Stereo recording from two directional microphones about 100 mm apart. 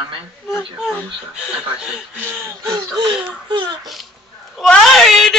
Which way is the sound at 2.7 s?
50° right (ahead or behind).